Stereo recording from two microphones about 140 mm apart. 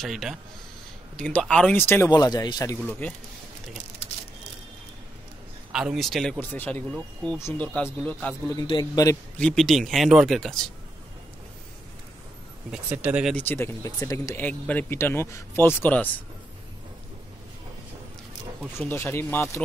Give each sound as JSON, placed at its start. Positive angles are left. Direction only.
{"t": 0.0, "sound": "speech", "side_deg": 0}
{"t": 2.0, "sound": "speech", "side_deg": 30}
{"t": 2.8, "sound": "speech", "side_deg": 10}
{"t": 5.7, "sound": "speech", "side_deg": -5}
{"t": 8.6, "sound": "speech", "side_deg": 30}
{"t": 9.4, "sound": "speech", "side_deg": 5}
{"t": 12.7, "sound": "speech", "side_deg": -10}
{"t": 13.3, "sound": "speech", "side_deg": 10}
{"t": 13.8, "sound": "speech", "side_deg": 25}
{"t": 18.9, "sound": "speech", "side_deg": 15}